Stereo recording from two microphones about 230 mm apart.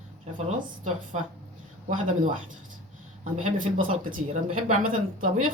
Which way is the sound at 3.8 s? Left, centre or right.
Right.